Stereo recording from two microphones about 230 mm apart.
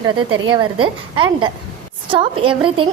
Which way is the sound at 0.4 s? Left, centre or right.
Centre.